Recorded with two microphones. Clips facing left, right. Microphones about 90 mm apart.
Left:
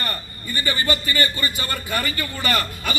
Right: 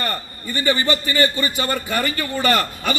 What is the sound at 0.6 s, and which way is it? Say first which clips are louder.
A man's voice: right 4 dB; 30° right (ahead or behind).